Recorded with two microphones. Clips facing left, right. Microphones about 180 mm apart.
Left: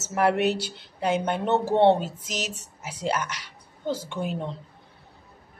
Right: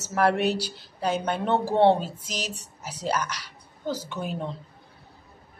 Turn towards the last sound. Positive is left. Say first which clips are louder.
# left 2 dB
turn(degrees=25)  # may be behind; listen again after turning